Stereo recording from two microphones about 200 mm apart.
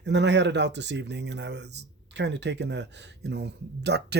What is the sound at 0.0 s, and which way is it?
Speech, 60° right (ahead or behind).